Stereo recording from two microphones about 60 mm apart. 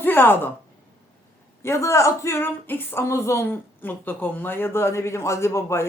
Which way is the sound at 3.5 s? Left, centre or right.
Left.